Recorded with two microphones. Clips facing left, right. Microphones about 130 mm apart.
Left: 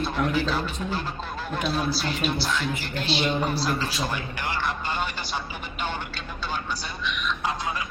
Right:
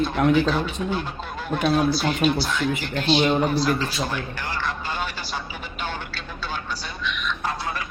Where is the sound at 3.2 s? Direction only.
45° right (ahead or behind).